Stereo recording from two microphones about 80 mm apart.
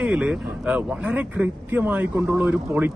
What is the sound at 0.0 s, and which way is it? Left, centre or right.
A man's voice, centre.